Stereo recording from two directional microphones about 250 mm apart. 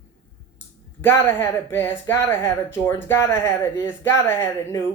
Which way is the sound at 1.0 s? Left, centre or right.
Centre.